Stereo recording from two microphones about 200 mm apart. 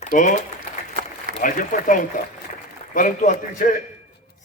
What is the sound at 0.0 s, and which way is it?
Speech, 40° left (ahead or behind).